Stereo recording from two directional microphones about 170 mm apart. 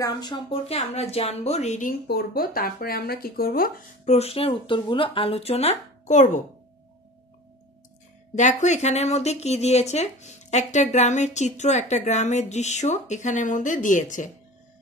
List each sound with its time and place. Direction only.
0.0 s speech: 25° left (ahead or behind); by 2.0 s 45° left (ahead or behind)
2.0 s speech: 65° left (ahead or behind)
4.1 s speech: 35° left (ahead or behind)
8.4 s speech: 45° left (ahead or behind)